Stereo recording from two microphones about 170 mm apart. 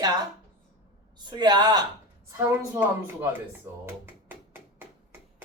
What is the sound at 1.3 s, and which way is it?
Speech, 25° right (ahead or behind).